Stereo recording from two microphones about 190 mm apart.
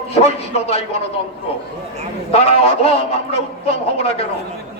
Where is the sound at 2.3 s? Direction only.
30° left (ahead or behind).